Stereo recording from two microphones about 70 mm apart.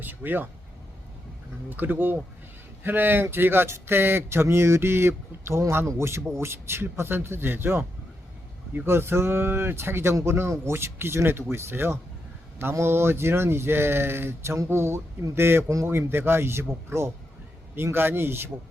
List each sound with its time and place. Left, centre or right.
0.0 s speech: right
1.7 s speech: right